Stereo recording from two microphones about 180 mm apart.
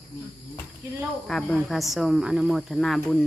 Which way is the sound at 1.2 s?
5° left (ahead or behind).